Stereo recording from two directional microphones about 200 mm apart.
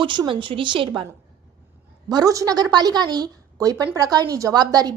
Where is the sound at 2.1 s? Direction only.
20° right (ahead or behind).